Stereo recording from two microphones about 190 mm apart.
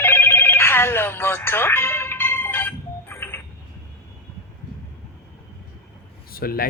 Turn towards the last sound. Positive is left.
turn(degrees=50)  # may be behind; listen again after turning